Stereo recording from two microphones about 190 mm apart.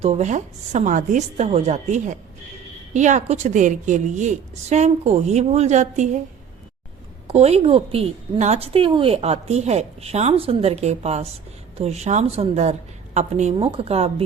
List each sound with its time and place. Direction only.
0.0 s a woman's voice: 35° right (ahead or behind)
7.3 s a woman's voice: 35° right (ahead or behind)